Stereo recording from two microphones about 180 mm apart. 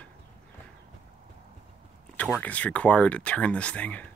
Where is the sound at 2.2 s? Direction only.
5° left (ahead or behind).